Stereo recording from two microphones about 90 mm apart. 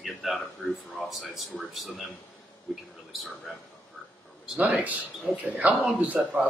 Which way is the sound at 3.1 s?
Centre (ahead or behind).